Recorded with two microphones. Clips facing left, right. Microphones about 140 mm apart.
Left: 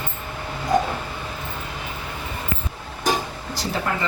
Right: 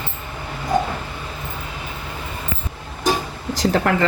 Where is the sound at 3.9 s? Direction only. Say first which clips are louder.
Right 4 dB; 75° right (ahead or behind).